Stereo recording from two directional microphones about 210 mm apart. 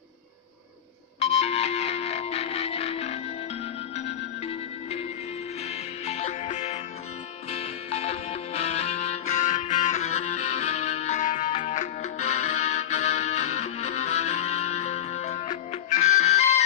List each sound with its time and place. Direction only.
1.2 s music: 30° left (ahead or behind)